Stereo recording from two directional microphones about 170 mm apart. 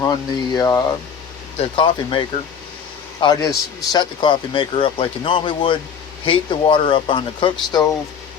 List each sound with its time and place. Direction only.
0.0 s speech: 20° left (ahead or behind)
1.5 s speech: 30° left (ahead or behind)